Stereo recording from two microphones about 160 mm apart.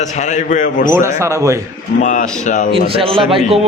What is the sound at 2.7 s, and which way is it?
Speech, 35° right (ahead or behind).